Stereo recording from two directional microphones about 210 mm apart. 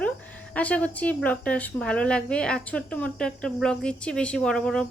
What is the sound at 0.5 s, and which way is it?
A woman's voice, 5° left (ahead or behind).